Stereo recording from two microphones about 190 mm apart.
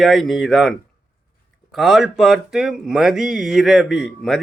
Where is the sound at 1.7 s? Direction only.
Centre (ahead or behind).